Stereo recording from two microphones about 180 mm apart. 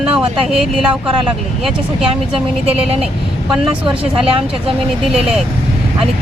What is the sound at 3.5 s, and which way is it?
Speech, 5° right (ahead or behind).